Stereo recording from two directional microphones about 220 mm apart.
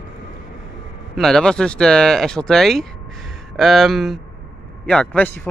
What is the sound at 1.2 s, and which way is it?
A man's voice, centre (ahead or behind).